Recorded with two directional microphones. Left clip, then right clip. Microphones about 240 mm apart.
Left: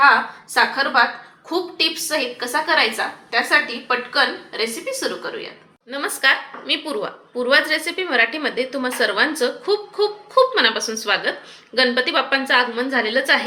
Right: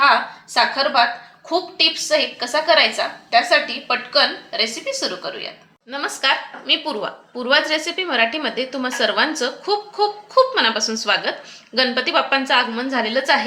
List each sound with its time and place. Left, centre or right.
0.0 s a woman's voice: right